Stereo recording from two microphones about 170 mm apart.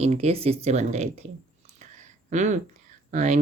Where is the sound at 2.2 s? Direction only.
45° right (ahead or behind).